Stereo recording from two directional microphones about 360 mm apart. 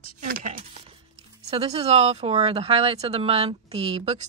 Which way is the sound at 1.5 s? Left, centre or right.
Centre.